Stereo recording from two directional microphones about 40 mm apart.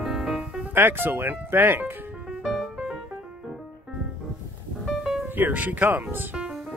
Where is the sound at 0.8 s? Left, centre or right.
Right.